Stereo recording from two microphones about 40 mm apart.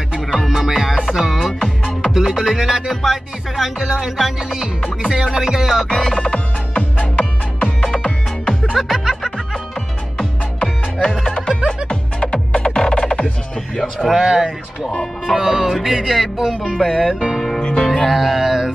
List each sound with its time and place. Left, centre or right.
0.4 s music: centre
5.9 s music: centre
6.7 s music: left
7.2 s music: left
8.7 s music: centre
10.6 s music: centre
14.2 s music: centre
17.6 s music: centre
17.8 s music: centre